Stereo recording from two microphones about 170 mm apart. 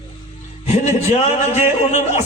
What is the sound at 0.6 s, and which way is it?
Speech, 40° left (ahead or behind).